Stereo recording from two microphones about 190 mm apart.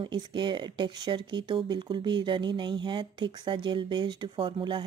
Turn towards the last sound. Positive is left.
turn(degrees=-25)  # may be behind; listen again after turning